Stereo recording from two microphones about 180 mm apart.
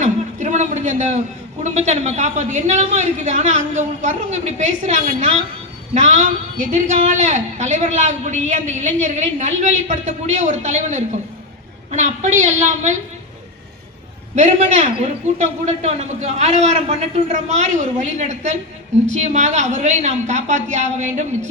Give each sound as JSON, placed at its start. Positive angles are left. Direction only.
{"t": 0.0, "sound": "a sound", "side_deg": -40}
{"t": 1.6, "sound": "a man's voice", "side_deg": -40}
{"t": 14.3, "sound": "a man's voice", "side_deg": -40}